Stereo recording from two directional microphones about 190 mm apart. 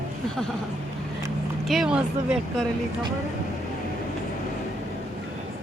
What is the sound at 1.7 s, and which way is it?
Speech, 5° right (ahead or behind).